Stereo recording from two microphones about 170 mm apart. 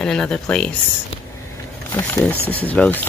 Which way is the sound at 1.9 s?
15° left (ahead or behind).